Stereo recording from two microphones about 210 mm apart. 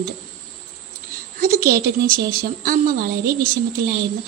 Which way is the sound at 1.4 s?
45° right (ahead or behind).